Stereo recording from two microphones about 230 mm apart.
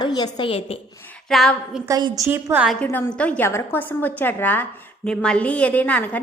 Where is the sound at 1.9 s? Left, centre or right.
Centre.